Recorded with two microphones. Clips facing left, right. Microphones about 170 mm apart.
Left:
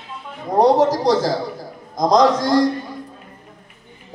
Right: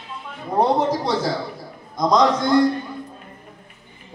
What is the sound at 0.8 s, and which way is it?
A man's voice, 40° left (ahead or behind).